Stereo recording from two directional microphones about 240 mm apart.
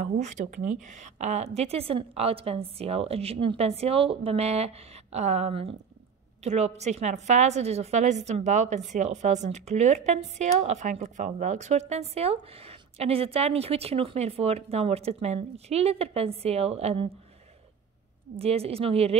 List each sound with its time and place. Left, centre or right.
0.0 s speech: right
18.4 s speech: right